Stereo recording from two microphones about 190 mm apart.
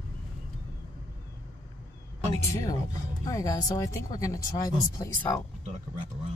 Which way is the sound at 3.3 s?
20° left (ahead or behind).